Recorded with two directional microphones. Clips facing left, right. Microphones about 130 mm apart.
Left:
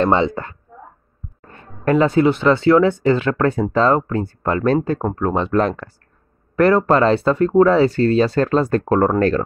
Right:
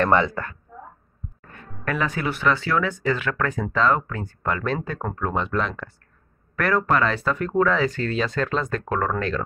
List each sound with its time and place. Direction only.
0.0 s speech: 25° left (ahead or behind); by 5.9 s 40° left (ahead or behind)
6.5 s speech: 25° left (ahead or behind)